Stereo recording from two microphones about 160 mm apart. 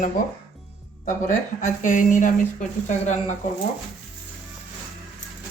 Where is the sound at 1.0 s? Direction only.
50° left (ahead or behind).